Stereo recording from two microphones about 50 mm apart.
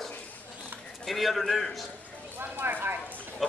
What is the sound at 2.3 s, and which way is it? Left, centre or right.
Speech, right.